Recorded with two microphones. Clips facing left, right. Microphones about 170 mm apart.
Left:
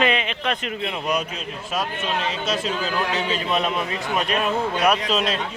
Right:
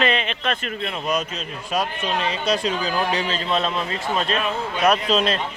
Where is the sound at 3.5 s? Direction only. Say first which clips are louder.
Right 1 dB; 15° left (ahead or behind).